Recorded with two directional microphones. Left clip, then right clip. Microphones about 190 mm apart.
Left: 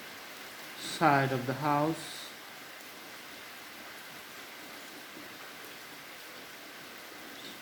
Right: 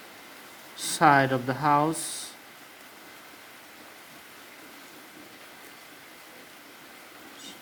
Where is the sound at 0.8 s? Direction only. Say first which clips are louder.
Right 6 dB; 45° right (ahead or behind).